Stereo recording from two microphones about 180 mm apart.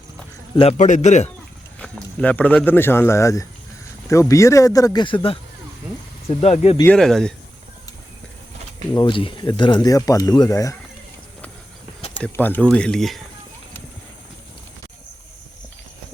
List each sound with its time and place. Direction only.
0.5 s a man's voice: 35° left (ahead or behind)
1.8 s a man's voice: 5° left (ahead or behind); by 6.7 s 35° left (ahead or behind)
6.8 s speech: 5° left (ahead or behind)
9.0 s speech: 30° left (ahead or behind)
12.1 s speech: 10° left (ahead or behind)